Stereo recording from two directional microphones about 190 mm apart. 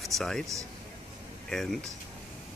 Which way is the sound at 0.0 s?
Centre (ahead or behind).